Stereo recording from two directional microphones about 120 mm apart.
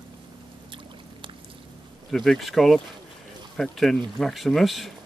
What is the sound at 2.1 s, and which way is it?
Speech, 5° left (ahead or behind).